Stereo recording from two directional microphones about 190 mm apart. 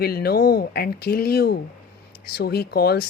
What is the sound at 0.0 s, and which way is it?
Speech, 55° left (ahead or behind).